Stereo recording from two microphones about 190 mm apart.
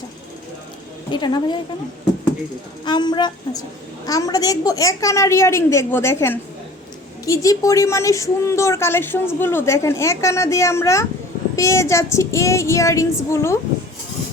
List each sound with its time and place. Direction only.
1.1 s a woman's voice: 25° left (ahead or behind)
2.8 s a woman's voice: 25° left (ahead or behind)